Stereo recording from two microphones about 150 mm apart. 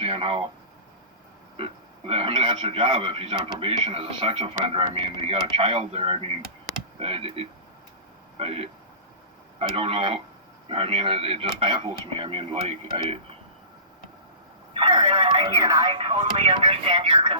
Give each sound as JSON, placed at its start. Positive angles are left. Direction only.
{"t": 0.0, "sound": "speech", "side_deg": -35}
{"t": 1.5, "sound": "speech", "side_deg": -40}
{"t": 14.7, "sound": "speech", "side_deg": -35}